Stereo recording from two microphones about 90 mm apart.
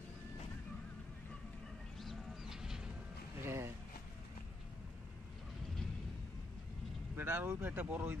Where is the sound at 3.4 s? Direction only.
30° right (ahead or behind).